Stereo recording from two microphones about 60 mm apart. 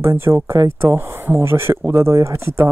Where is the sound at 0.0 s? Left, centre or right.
Right.